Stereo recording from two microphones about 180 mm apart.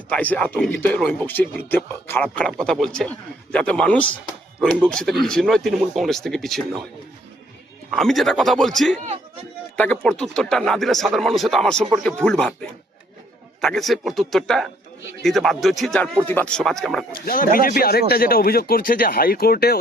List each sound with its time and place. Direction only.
0.1 s speech: 5° left (ahead or behind)
7.9 s speech: centre (ahead or behind)
9.0 s a sound: 35° right (ahead or behind)
9.7 s speech: 10° left (ahead or behind)
13.6 s speech: centre (ahead or behind)
17.2 s speech: 50° left (ahead or behind)